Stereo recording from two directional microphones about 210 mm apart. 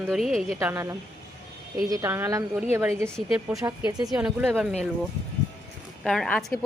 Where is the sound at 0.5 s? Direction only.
15° right (ahead or behind).